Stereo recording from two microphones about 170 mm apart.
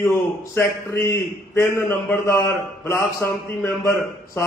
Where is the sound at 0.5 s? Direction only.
15° left (ahead or behind).